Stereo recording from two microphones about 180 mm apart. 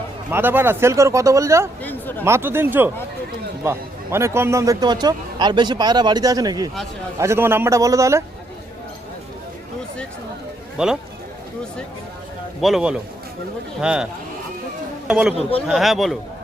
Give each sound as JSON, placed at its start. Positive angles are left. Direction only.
{"t": 0.3, "sound": "speech", "side_deg": -10}
{"t": 1.8, "sound": "a sound", "side_deg": 10}
{"t": 2.2, "sound": "a man's voice", "side_deg": -15}
{"t": 10.8, "sound": "speech", "side_deg": -5}
{"t": 12.6, "sound": "speech", "side_deg": -5}
{"t": 15.4, "sound": "speech", "side_deg": 30}
{"t": 15.6, "sound": "speech", "side_deg": -5}